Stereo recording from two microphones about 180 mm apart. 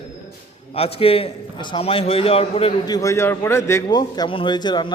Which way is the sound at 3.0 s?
15° left (ahead or behind).